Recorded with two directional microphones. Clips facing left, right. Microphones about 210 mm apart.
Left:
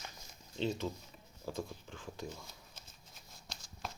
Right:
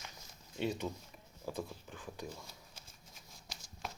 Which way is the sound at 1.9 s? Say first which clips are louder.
Left 1 dB; 10° right (ahead or behind).